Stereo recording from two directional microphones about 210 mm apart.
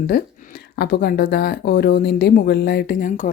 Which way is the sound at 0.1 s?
40° left (ahead or behind).